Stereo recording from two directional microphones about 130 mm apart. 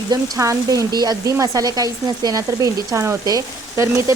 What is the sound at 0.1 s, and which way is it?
Speech, 25° right (ahead or behind).